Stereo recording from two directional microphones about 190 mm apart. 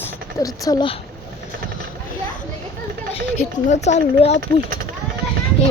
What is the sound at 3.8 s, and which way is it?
Speech, 35° left (ahead or behind).